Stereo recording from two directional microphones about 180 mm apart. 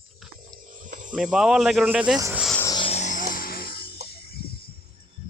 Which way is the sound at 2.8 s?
35° left (ahead or behind).